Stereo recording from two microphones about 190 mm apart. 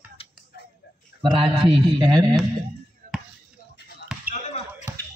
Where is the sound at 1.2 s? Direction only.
25° right (ahead or behind).